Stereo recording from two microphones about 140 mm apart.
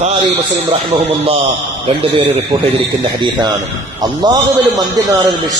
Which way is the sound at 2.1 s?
35° right (ahead or behind).